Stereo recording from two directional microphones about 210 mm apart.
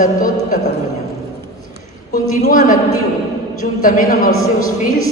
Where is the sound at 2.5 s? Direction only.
40° left (ahead or behind).